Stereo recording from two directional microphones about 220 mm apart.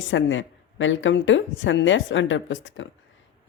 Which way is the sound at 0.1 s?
60° left (ahead or behind).